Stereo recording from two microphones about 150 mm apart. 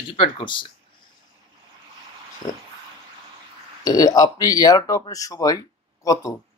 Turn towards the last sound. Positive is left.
turn(degrees=20)  # may be behind; listen again after turning